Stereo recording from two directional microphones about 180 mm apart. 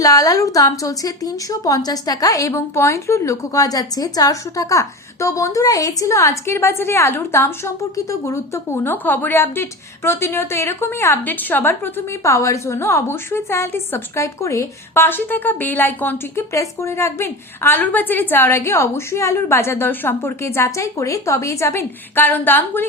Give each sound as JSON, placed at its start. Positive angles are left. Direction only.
{"t": 0.0, "sound": "a woman's voice", "side_deg": 20}